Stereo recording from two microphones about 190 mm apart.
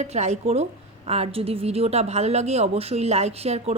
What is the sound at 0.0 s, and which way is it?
A woman's voice, 35° right (ahead or behind).